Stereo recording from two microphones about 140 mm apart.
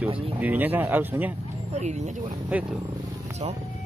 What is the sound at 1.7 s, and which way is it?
Speech, 55° right (ahead or behind).